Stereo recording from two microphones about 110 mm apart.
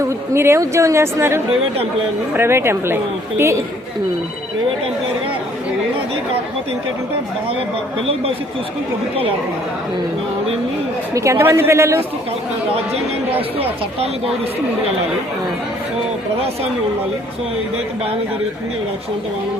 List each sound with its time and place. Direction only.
0.3 s a woman's voice: 25° right (ahead or behind)
11.1 s a woman's voice: 25° right (ahead or behind)